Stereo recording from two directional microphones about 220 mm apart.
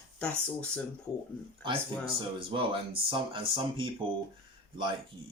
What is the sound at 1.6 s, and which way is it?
Speech, 25° right (ahead or behind).